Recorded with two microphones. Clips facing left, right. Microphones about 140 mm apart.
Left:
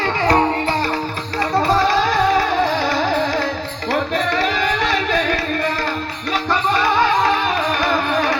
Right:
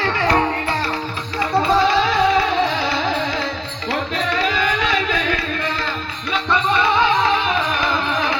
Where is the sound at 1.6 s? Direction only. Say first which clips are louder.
Even; 40° left (ahead or behind).